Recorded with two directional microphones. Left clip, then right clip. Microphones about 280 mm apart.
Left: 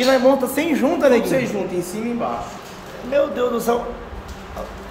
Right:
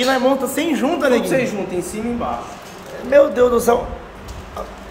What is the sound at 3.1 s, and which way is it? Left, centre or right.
Speech, centre.